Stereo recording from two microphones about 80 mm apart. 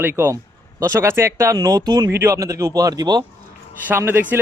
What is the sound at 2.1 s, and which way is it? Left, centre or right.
Speech, right.